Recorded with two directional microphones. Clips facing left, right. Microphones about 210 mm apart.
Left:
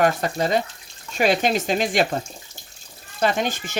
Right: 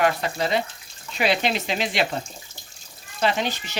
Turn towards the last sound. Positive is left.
turn(degrees=50)  # may be behind; listen again after turning